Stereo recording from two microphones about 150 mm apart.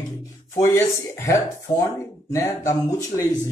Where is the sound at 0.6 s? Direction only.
20° left (ahead or behind).